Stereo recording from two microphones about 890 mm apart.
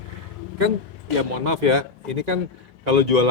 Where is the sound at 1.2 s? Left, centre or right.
Right.